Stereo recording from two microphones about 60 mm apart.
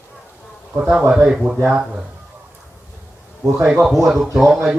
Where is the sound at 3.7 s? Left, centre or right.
Centre.